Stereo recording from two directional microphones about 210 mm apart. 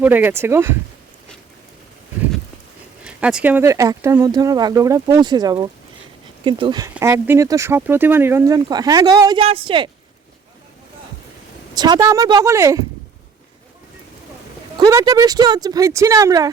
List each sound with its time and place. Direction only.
0.0 s speech: 10° right (ahead or behind)
3.0 s speech: 5° right (ahead or behind); by 9.9 s 25° right (ahead or behind)
11.7 s speech: 20° right (ahead or behind)
14.8 s speech: 15° right (ahead or behind)